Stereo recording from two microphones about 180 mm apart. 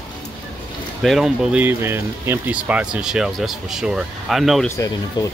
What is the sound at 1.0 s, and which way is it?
Speech, centre (ahead or behind).